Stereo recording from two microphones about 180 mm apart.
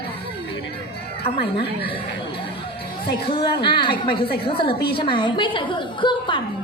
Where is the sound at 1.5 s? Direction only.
30° left (ahead or behind).